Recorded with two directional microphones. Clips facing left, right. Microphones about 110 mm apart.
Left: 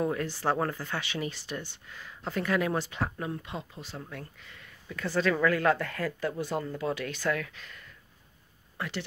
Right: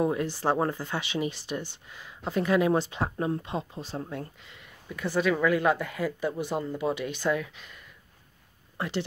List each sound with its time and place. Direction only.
0.0 s speech: 20° right (ahead or behind)